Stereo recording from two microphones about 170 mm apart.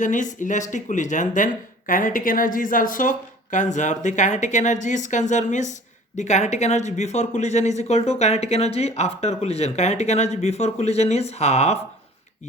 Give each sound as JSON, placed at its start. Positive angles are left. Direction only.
{"t": 0.0, "sound": "speech", "side_deg": 45}